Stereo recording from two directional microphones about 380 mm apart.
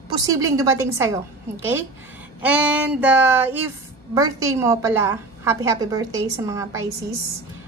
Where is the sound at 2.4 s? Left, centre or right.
Centre.